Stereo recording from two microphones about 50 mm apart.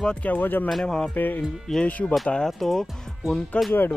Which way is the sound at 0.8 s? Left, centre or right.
Centre.